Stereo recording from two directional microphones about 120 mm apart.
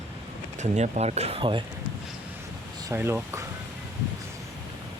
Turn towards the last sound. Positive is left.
turn(degrees=-20)  # may be behind; listen again after turning